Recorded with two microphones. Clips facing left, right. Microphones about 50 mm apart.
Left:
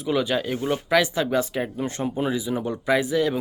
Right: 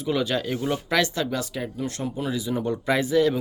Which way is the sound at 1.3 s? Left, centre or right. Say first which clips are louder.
Left 5 dB; left.